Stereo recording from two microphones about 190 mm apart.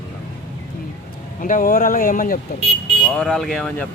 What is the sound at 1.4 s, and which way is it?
Speech, 45° left (ahead or behind).